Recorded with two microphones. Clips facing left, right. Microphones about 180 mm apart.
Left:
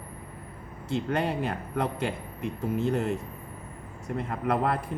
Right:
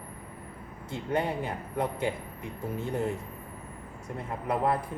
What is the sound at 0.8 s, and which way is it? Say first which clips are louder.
Speech: left 2 dB; 75° left (ahead or behind).